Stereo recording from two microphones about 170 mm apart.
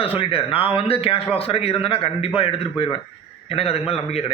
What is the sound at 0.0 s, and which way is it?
A man's voice, 30° left (ahead or behind).